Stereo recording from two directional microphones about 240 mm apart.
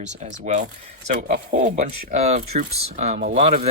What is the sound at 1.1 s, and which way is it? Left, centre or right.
Speech, right.